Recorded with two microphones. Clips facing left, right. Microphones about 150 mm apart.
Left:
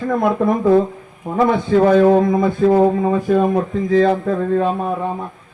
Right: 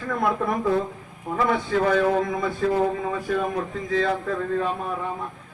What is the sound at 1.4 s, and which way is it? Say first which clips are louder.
A man's voice: left 8 dB; 30° left (ahead or behind).